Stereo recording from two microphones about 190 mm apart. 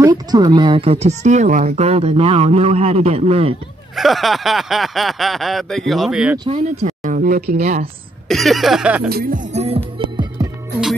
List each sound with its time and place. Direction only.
0.0 s speech: 20° right (ahead or behind)
3.9 s speech: centre (ahead or behind)
6.3 s speech: 25° right (ahead or behind)
6.6 s speech: 35° right (ahead or behind)
7.5 s speech: 40° right (ahead or behind)
8.3 s speech: centre (ahead or behind)
9.1 s speech: 50° right (ahead or behind)
9.5 s music: 35° right (ahead or behind)